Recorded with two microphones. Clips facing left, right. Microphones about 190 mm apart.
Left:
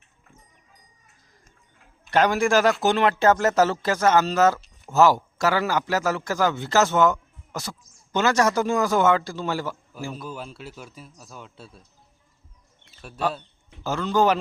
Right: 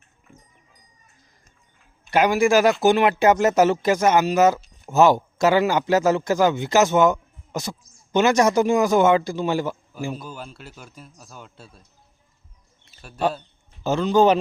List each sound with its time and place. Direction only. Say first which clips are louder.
2.0 s speech: right 2 dB; 10° right (ahead or behind)
10.2 s speech: left 1 dB; centre (ahead or behind)
13.8 s a man's voice: right 4 dB; 20° right (ahead or behind)